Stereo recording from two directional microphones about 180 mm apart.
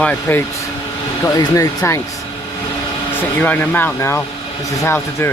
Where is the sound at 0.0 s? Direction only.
10° left (ahead or behind).